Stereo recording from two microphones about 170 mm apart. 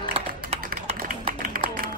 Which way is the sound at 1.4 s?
55° right (ahead or behind).